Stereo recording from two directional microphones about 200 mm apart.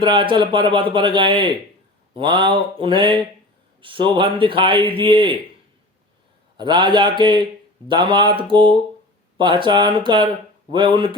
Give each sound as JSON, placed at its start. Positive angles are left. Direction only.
{"t": 0.0, "sound": "a man's voice", "side_deg": -25}
{"t": 6.6, "sound": "a man's voice", "side_deg": -20}